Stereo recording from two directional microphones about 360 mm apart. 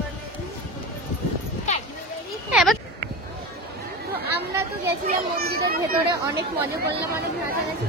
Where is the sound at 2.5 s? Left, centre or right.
Centre.